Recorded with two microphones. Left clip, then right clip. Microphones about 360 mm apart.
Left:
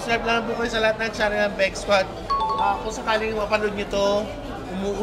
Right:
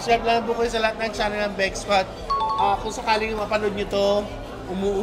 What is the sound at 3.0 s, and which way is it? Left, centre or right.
A man's voice, right.